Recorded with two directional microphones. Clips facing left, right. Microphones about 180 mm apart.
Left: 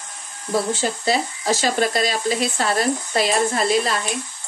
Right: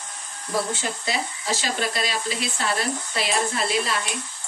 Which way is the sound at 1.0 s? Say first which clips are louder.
Left 8 dB; 45° left (ahead or behind).